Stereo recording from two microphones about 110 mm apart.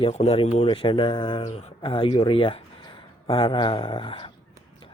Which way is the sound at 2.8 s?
50° left (ahead or behind).